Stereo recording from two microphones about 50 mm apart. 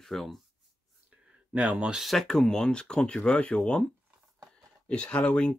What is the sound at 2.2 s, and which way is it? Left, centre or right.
Speech, centre.